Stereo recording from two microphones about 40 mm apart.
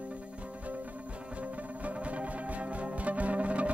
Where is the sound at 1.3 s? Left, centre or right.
Right.